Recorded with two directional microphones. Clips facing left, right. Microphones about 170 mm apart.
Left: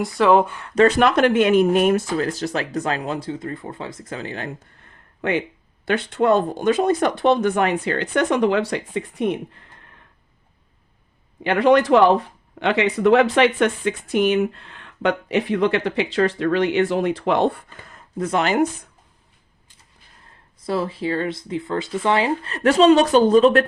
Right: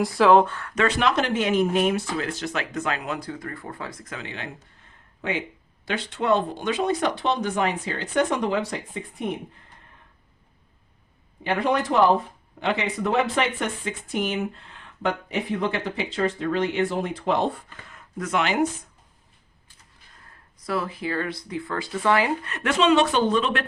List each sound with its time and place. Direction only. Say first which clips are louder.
0.0 s speech: left 1 dB; centre (ahead or behind)
0.4 s speech: right 1 dB; 15° left (ahead or behind)
0.8 s speech: left 7 dB; 45° left (ahead or behind)
5.8 s speech: left 7 dB; 55° left (ahead or behind); by 9.4 s 75° left (ahead or behind)
11.4 s speech: left 8 dB; 80° left; by 17.6 s 65° left (ahead or behind)
17.8 s a sound: left 6 dB; 35° left (ahead or behind)
20.7 s speech: left 5 dB; 30° left (ahead or behind)